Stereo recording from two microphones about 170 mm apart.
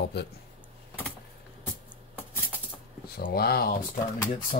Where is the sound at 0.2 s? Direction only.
75° left (ahead or behind).